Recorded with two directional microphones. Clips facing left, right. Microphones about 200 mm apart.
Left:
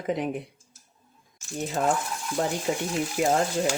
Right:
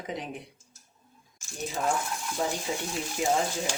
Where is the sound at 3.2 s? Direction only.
65° left (ahead or behind).